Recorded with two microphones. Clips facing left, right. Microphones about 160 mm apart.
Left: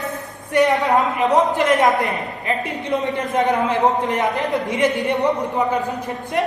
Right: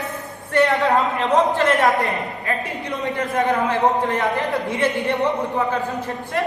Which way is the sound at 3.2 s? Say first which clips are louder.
Right 1 dB; 20° left (ahead or behind).